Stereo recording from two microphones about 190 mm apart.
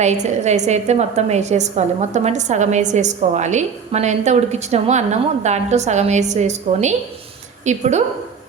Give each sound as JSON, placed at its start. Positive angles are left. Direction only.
{"t": 0.0, "sound": "a woman's voice", "side_deg": -35}